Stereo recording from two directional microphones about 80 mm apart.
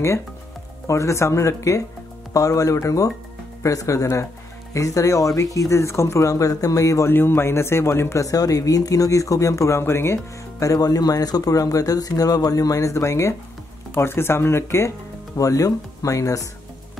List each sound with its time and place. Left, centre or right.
0.8 s speech: left
7.1 s speech: left
15.3 s speech: left